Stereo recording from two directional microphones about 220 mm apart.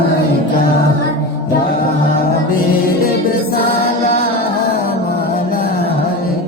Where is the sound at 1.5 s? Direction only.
40° left (ahead or behind).